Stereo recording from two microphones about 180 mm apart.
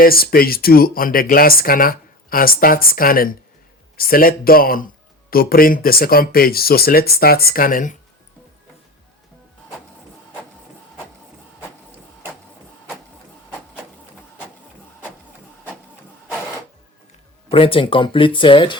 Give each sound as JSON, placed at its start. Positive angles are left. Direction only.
{"t": 0.0, "sound": "speech", "side_deg": 55}
{"t": 17.5, "sound": "speech", "side_deg": 30}